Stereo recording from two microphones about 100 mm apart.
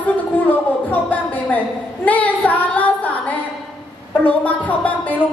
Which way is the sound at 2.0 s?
15° left (ahead or behind).